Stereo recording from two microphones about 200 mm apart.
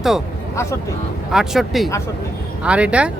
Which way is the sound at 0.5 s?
15° left (ahead or behind).